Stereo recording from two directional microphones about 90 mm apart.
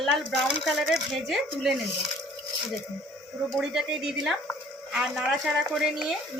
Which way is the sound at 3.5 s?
5° right (ahead or behind).